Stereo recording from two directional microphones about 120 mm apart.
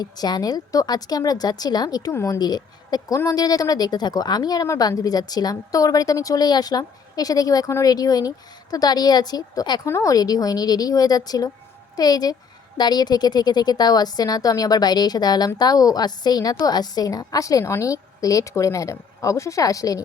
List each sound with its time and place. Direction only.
0.0 s a woman's voice: 35° left (ahead or behind)